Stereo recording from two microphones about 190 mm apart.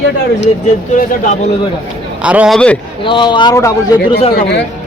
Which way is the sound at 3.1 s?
25° left (ahead or behind).